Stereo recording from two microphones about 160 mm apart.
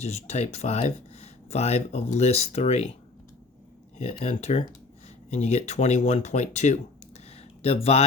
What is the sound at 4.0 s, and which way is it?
Speech, 45° left (ahead or behind).